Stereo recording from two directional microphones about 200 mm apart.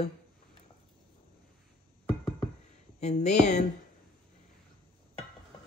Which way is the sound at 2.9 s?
35° left (ahead or behind).